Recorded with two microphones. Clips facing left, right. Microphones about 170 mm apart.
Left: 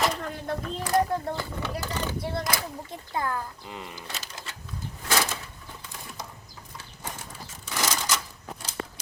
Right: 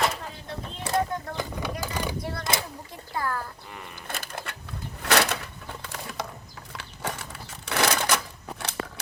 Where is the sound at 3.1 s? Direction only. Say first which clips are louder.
Even; 20° left (ahead or behind).